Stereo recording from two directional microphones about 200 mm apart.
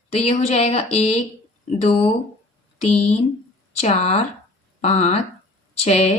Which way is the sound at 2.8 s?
35° left (ahead or behind).